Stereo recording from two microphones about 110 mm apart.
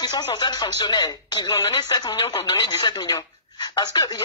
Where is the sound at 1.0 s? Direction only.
40° left (ahead or behind).